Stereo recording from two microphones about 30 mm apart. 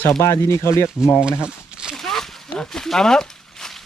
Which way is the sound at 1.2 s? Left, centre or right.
Right.